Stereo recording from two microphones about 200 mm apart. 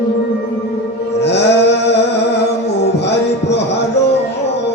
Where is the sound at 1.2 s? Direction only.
60° left (ahead or behind).